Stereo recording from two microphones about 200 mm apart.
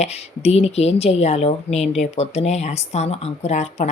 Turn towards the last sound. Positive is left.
turn(degrees=35)  # may be behind; listen again after turning